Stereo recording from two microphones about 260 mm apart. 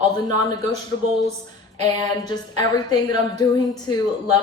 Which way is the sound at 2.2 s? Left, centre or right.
Centre.